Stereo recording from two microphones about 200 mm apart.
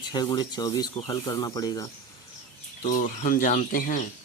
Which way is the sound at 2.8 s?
40° left (ahead or behind).